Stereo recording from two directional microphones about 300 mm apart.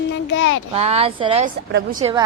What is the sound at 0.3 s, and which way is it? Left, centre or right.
Speech, left.